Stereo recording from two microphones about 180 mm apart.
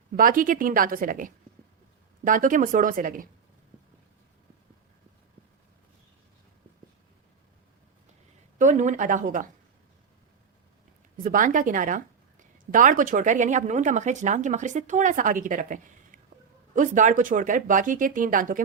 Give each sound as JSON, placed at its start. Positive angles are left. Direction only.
{"t": 0.1, "sound": "a woman's voice", "side_deg": -50}
{"t": 8.5, "sound": "a woman's voice", "side_deg": -45}
{"t": 11.2, "sound": "a woman's voice", "side_deg": -45}